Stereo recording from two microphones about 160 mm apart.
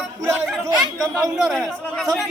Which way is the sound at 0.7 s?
20° right (ahead or behind).